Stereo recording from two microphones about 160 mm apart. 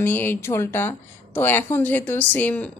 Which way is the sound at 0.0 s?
10° left (ahead or behind).